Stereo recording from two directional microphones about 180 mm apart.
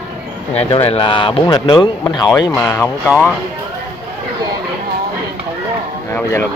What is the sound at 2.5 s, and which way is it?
Speech, 15° left (ahead or behind).